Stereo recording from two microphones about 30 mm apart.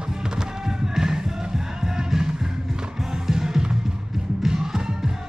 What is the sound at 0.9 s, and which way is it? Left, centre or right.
Music, centre.